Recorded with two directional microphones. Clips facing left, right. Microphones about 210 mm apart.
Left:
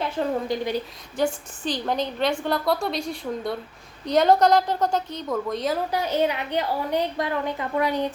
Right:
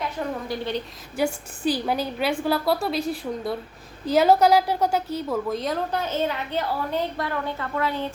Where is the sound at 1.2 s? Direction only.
10° right (ahead or behind).